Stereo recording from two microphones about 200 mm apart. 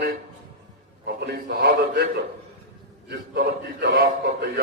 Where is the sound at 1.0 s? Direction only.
55° right (ahead or behind).